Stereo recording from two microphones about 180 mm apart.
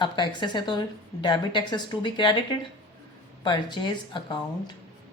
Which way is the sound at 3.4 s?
25° left (ahead or behind).